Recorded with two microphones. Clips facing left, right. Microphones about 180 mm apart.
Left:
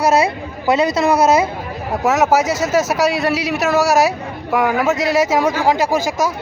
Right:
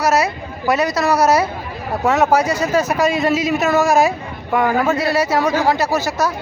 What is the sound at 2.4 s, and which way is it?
Speech, 90° left.